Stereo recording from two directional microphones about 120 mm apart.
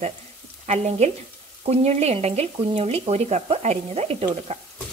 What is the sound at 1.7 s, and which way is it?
Stir, 65° right (ahead or behind).